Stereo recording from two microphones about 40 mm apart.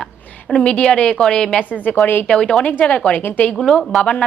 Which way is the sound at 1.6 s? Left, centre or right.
Left.